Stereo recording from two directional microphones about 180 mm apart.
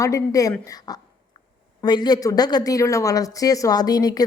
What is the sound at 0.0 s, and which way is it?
Speech, 20° left (ahead or behind).